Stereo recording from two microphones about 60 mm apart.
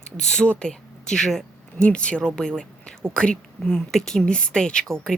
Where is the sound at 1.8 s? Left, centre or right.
Centre.